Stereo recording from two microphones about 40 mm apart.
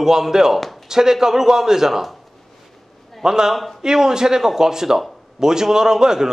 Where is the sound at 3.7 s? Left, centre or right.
Centre.